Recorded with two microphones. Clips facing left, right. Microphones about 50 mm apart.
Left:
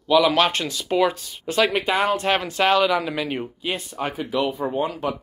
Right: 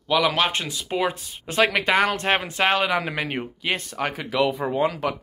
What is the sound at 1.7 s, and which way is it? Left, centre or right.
Speech, right.